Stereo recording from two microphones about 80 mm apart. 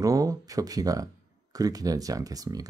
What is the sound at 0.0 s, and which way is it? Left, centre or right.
Speech, right.